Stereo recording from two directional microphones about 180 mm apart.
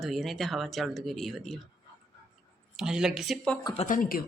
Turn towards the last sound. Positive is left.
turn(degrees=50)  # may be behind; listen again after turning